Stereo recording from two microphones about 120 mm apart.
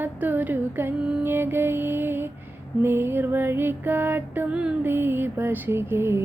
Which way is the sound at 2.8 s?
20° right (ahead or behind).